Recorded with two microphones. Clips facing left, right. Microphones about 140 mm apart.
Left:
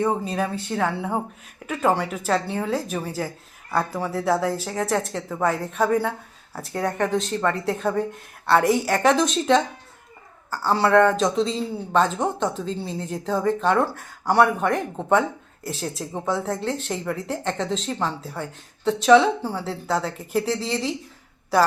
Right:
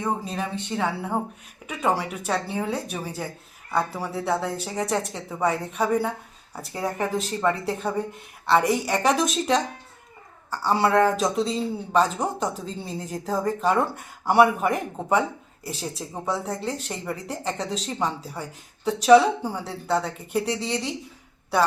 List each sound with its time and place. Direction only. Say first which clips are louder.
0.0 s speech: left 4 dB; centre (ahead or behind)
10.8 s speech: left 3 dB; centre (ahead or behind)
19.6 s speech: even; centre (ahead or behind)